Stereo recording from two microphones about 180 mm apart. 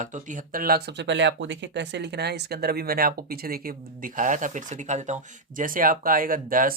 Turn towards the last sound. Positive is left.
turn(degrees=-50)  # may be behind; listen again after turning